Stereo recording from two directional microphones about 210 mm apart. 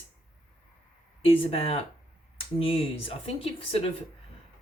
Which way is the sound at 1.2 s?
25° left (ahead or behind).